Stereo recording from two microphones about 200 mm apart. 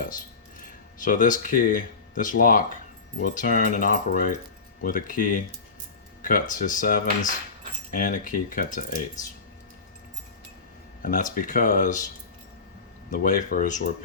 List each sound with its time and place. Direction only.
1.0 s speech: 40° left (ahead or behind)
11.0 s speech: 40° left (ahead or behind)
13.1 s speech: 40° left (ahead or behind)